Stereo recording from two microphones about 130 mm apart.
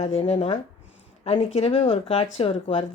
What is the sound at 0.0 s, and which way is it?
Speech, 50° left (ahead or behind).